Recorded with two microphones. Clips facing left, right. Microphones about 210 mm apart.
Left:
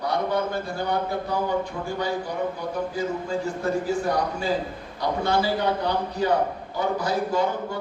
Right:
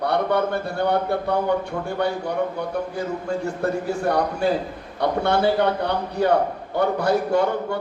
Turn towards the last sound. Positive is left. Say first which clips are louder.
# right 4 dB
turn(degrees=-65)  # may be behind; listen again after turning